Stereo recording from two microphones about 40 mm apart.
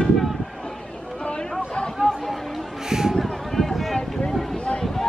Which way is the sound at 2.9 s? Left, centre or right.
Centre.